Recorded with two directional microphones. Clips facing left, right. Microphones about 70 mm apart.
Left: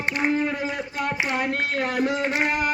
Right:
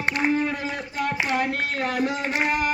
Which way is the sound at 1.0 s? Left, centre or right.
Left.